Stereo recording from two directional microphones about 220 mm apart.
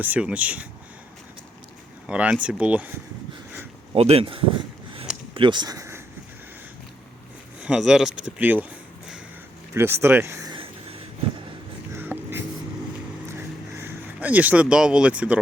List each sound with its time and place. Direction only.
0.0 s speech: 5° right (ahead or behind)
2.0 s speech: 5° right (ahead or behind)
3.9 s speech: 25° right (ahead or behind)
7.6 s speech: 5° right (ahead or behind)
9.7 s a sound: 10° right (ahead or behind)
11.9 s a sound: 10° right (ahead or behind)
13.7 s speech: 10° right (ahead or behind)